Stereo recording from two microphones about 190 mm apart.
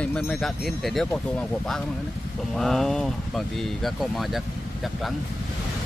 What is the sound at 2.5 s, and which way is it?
Speech, centre (ahead or behind).